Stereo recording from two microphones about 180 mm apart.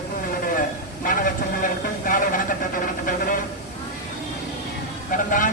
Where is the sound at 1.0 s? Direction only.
50° left (ahead or behind).